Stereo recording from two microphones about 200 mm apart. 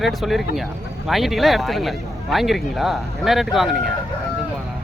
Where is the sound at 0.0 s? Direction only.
Centre (ahead or behind).